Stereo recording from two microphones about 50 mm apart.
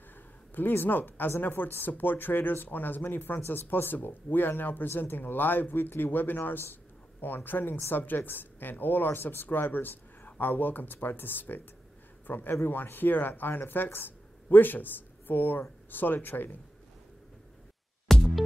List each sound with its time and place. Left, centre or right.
0.6 s speech: left
18.1 s music: centre